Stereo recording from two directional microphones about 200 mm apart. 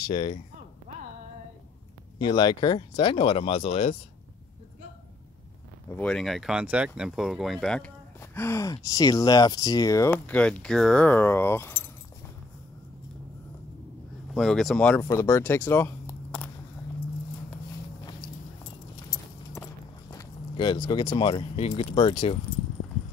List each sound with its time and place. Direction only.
0.0 s speech: 25° left (ahead or behind)
2.1 s speech: 20° left (ahead or behind)
5.9 s speech: 5° left (ahead or behind)
8.4 s speech: 15° left (ahead or behind)
14.3 s speech: centre (ahead or behind)
19.5 s speech: 15° left (ahead or behind)